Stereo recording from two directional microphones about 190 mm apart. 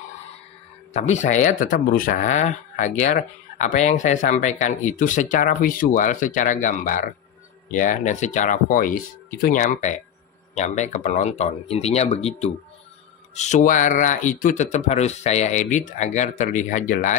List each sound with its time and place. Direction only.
0.9 s speech: 40° left (ahead or behind)